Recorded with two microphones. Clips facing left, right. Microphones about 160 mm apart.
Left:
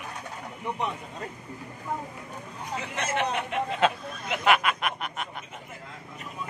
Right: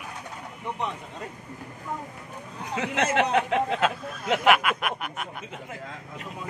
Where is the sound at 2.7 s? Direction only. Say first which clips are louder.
Right 5 dB; 75° right (ahead or behind); by 3.8 s 90° right.